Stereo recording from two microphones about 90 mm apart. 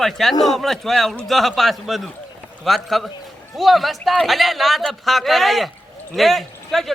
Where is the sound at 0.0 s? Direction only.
5° left (ahead or behind).